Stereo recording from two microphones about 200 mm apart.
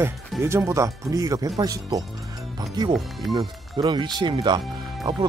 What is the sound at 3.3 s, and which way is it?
Speech, 25° right (ahead or behind).